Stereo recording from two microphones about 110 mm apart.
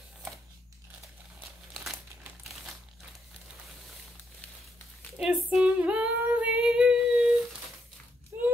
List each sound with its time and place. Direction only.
1.8 s crumpling: 5° right (ahead or behind)
5.1 s female singing: 5° right (ahead or behind)
8.3 s a sound: 25° right (ahead or behind)